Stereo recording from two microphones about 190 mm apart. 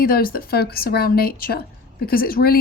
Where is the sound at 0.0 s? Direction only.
50° left (ahead or behind).